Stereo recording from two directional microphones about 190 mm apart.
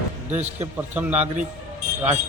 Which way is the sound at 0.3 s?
10° right (ahead or behind).